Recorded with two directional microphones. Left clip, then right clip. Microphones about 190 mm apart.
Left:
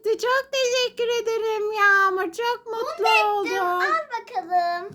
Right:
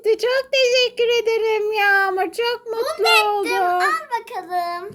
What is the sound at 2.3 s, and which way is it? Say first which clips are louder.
Speech: right 3 dB; 50° left (ahead or behind).